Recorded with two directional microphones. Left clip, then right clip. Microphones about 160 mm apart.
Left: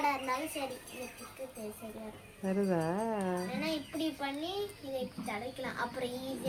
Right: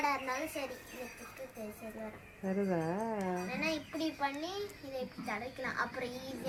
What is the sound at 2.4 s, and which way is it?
Speech, 5° left (ahead or behind).